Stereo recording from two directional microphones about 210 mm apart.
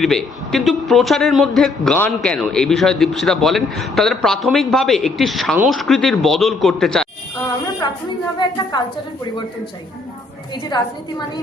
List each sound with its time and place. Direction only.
0.0 s a man's voice: centre (ahead or behind)
7.8 s a woman's voice: 20° left (ahead or behind)
10.5 s a woman's voice: 20° left (ahead or behind)